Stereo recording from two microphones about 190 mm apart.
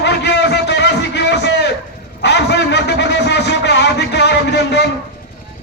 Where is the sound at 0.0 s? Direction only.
65° left (ahead or behind).